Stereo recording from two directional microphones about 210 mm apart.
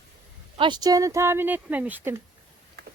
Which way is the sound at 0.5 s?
20° right (ahead or behind).